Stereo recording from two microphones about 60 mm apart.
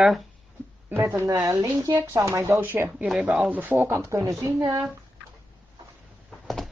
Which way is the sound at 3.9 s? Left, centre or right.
Right.